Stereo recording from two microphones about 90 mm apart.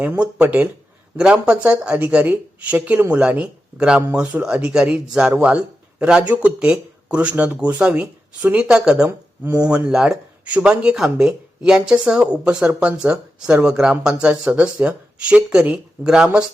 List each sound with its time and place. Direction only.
0.2 s speech: 15° right (ahead or behind)
9.0 s speech: 25° right (ahead or behind)
9.6 s speech: 10° right (ahead or behind)